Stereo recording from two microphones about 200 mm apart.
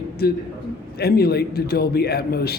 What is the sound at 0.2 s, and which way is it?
A man's voice, 50° left (ahead or behind).